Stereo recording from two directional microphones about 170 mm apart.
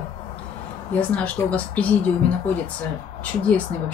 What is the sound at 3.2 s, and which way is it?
Speech, 10° left (ahead or behind).